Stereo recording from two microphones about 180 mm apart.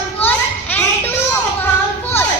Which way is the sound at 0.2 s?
10° left (ahead or behind).